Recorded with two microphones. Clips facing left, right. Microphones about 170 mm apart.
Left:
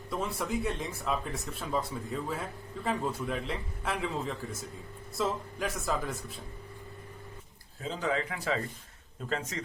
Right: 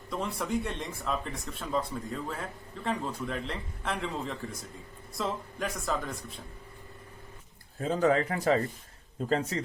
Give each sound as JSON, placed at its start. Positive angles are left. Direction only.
{"t": 0.1, "sound": "speech", "side_deg": 5}
{"t": 7.8, "sound": "a man's voice", "side_deg": -50}